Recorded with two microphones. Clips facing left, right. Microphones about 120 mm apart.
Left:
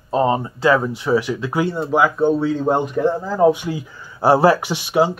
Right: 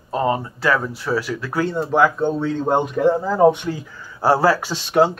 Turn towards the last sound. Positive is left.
turn(degrees=5)  # may be behind; listen again after turning